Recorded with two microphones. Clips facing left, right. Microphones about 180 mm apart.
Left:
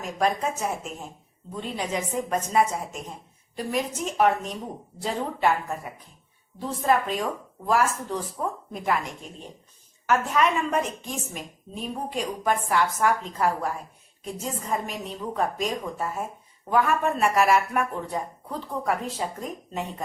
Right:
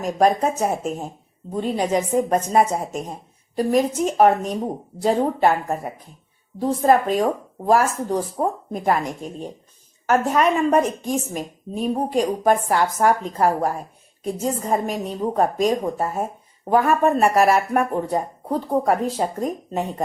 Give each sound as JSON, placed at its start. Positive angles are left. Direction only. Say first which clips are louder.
{"t": 0.0, "sound": "a woman's voice", "louder": "right 7 dB", "side_deg": -40}